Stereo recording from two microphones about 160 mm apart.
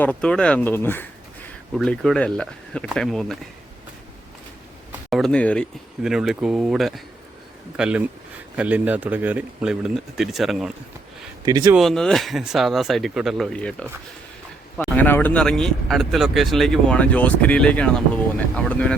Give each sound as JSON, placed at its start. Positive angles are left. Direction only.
{"t": 0.0, "sound": "speech", "side_deg": 10}
{"t": 1.8, "sound": "speech", "side_deg": 5}
{"t": 4.9, "sound": "speech", "side_deg": 0}
{"t": 6.0, "sound": "speech", "side_deg": -5}
{"t": 11.4, "sound": "speech", "side_deg": -25}
{"t": 11.7, "sound": "speech", "side_deg": 0}
{"t": 14.9, "sound": "speech", "side_deg": 10}